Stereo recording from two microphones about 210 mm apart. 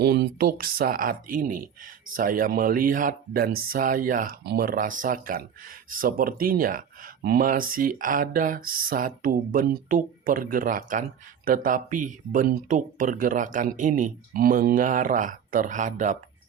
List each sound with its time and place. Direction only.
0.0 s speech: 50° right (ahead or behind); by 16.1 s 35° right (ahead or behind)